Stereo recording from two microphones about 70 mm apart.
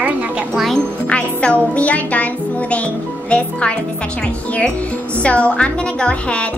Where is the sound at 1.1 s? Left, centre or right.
Centre.